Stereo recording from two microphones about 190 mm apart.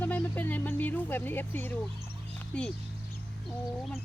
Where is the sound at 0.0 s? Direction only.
10° left (ahead or behind).